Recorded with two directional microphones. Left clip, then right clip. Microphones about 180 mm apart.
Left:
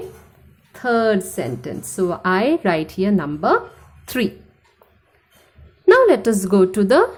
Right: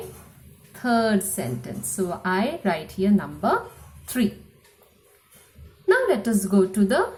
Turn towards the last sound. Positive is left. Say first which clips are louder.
# left 7 dB
turn(degrees=45)  # may be behind; listen again after turning